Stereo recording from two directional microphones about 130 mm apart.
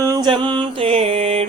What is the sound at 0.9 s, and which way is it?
Music, 50° right (ahead or behind).